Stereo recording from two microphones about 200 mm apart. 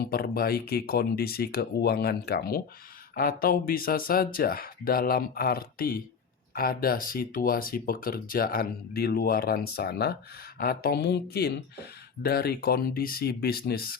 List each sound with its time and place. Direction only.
0.0 s speech: 50° left (ahead or behind)